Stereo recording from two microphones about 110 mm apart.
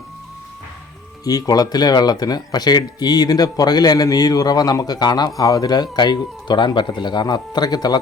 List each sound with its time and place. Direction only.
1.2 s speech: 35° left (ahead or behind)